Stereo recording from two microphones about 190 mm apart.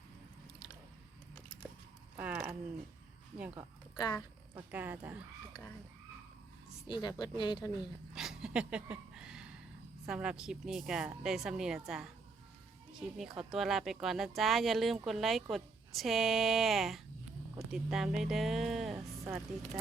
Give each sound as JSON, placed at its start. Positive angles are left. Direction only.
{"t": 2.1, "sound": "a sound", "side_deg": -10}
{"t": 3.9, "sound": "speech", "side_deg": 20}
{"t": 4.7, "sound": "speech", "side_deg": -10}
{"t": 6.8, "sound": "speech", "side_deg": 20}
{"t": 8.1, "sound": "a sound", "side_deg": 0}
{"t": 10.1, "sound": "speech", "side_deg": -5}
{"t": 18.9, "sound": "music", "side_deg": -15}